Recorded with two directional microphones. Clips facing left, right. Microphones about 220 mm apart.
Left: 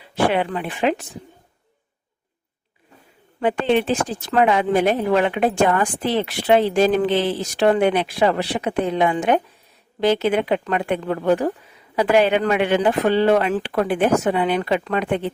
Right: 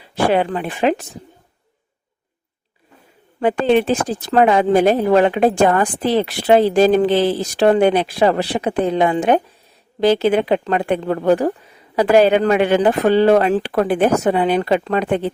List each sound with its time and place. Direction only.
0.3 s speech: 40° right (ahead or behind)
3.4 s speech: 40° right (ahead or behind)